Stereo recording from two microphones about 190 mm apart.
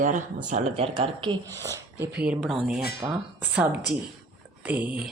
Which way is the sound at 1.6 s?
15° right (ahead or behind).